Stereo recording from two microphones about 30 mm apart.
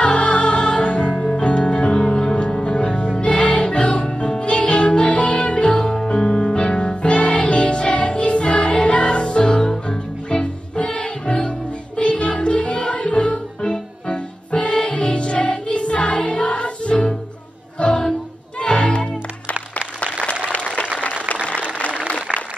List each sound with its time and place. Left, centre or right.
0.0 s music: left
1.1 s music: left
1.4 s music: left
13.6 s music: left
14.1 s music: left
20.4 s applause: left